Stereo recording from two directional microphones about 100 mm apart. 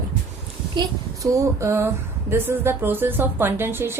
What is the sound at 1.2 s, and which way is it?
Speech, 30° right (ahead or behind).